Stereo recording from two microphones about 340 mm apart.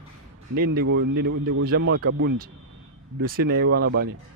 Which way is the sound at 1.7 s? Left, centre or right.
Right.